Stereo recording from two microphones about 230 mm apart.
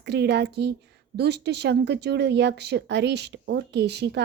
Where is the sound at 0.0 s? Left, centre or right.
Right.